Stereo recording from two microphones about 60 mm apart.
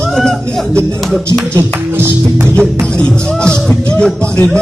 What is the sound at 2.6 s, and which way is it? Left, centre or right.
A man's voice, centre.